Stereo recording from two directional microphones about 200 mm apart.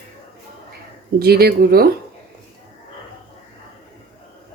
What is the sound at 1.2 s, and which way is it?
Speech, 50° right (ahead or behind).